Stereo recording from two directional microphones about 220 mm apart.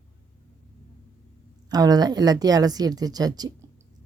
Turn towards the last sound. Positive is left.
turn(degrees=-20)  # may be behind; listen again after turning